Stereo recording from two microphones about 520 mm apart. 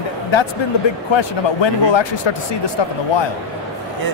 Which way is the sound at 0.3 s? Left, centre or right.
Left.